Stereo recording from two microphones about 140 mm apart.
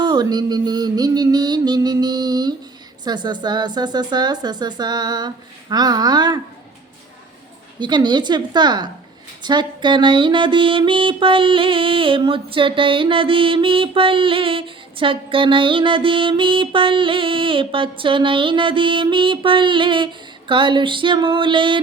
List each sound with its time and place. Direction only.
0.0 s speech: 30° right (ahead or behind)
7.8 s mantra: 30° right (ahead or behind)